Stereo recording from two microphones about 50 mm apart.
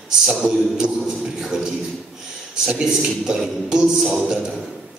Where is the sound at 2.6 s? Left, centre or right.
Centre.